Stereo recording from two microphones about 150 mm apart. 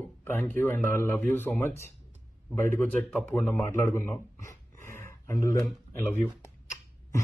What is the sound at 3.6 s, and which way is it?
Speech, 15° left (ahead or behind).